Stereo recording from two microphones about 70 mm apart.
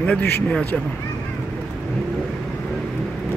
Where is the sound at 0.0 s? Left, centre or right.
Centre.